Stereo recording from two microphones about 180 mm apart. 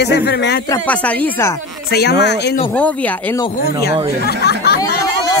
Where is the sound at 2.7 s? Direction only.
10° left (ahead or behind).